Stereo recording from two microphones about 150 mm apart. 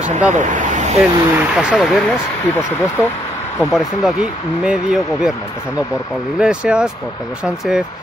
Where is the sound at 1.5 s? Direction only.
Centre (ahead or behind).